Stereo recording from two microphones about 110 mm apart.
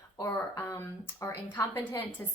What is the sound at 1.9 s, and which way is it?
Speech, 30° left (ahead or behind).